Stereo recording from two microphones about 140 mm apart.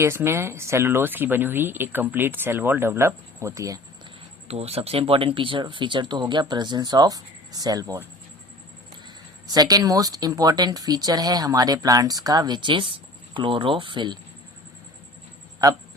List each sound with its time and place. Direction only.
0.0 s speech: 20° right (ahead or behind)
4.4 s speech: 45° right (ahead or behind); by 8.0 s 25° right (ahead or behind)
9.5 s speech: 30° right (ahead or behind)